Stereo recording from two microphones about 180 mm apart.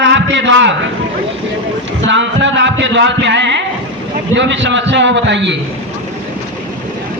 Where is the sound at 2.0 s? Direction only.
90° right.